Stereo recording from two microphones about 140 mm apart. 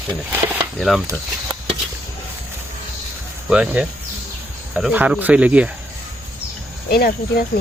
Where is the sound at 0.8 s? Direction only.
Centre (ahead or behind).